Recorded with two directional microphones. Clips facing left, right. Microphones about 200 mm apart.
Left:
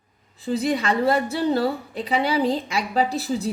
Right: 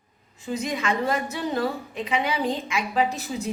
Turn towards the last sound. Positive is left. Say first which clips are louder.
# left 3 dB
turn(degrees=35)  # may be behind; listen again after turning